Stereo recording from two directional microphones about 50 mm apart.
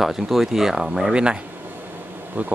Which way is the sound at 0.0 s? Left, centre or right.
Centre.